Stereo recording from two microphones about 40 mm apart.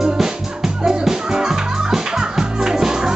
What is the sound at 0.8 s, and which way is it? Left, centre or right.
Music, centre.